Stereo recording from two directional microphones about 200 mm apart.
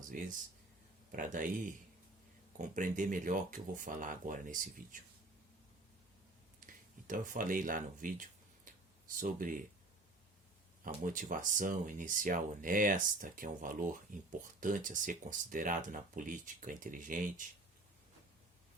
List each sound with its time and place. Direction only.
0.1 s speech: 40° right (ahead or behind)
6.7 s speech: 45° right (ahead or behind)
10.8 s speech: 40° right (ahead or behind)